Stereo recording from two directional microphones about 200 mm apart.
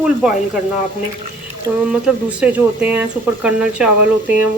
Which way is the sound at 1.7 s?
15° right (ahead or behind).